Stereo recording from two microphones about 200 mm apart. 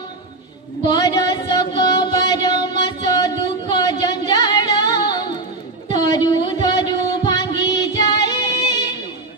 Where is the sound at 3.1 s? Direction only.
20° left (ahead or behind).